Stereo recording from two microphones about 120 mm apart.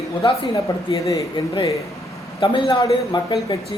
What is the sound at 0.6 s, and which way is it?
Speech, 30° left (ahead or behind).